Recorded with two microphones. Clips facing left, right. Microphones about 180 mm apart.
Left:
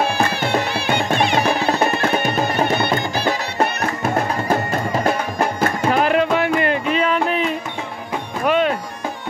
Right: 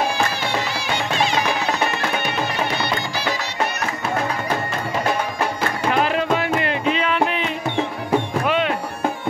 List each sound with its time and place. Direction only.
0.4 s music: 55° left (ahead or behind)
5.6 s music: 50° left (ahead or behind)
8.5 s music: 45° left (ahead or behind)